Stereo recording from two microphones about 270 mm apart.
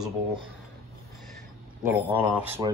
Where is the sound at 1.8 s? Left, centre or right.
Centre.